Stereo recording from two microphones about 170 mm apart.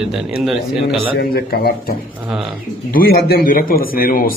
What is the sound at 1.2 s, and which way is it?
Speech, 65° left (ahead or behind).